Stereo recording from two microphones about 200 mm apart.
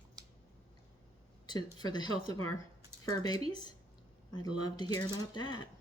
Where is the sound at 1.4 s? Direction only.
20° left (ahead or behind).